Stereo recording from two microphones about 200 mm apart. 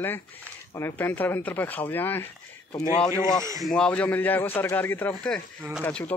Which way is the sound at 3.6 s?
5° left (ahead or behind).